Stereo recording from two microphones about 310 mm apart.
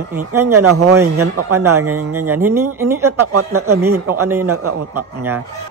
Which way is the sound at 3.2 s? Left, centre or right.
Right.